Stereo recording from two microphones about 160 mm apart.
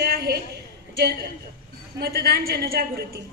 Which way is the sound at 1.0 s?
85° right.